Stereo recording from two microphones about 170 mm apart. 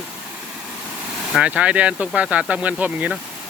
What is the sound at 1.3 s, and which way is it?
Speech, 5° right (ahead or behind).